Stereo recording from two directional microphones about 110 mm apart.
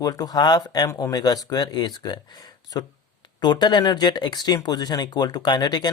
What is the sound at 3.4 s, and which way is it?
Speech, 45° left (ahead or behind).